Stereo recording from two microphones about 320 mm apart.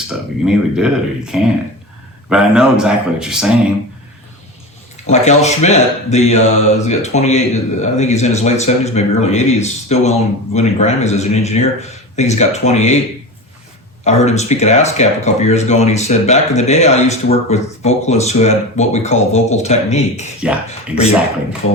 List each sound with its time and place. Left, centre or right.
0.1 s speech: centre
5.1 s speech: left
14.0 s speech: left